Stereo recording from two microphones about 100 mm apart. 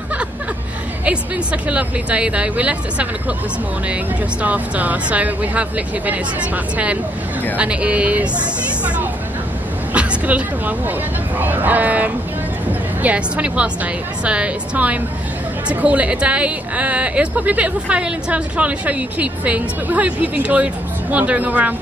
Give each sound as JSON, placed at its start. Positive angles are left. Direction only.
{"t": 1.0, "sound": "a woman's voice", "side_deg": -10}
{"t": 4.4, "sound": "a woman's voice", "side_deg": -15}
{"t": 9.9, "sound": "a sound", "side_deg": -15}
{"t": 11.3, "sound": "a woman's voice", "side_deg": -20}